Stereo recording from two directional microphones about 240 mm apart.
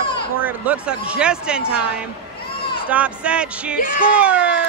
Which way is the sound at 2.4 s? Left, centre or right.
Left.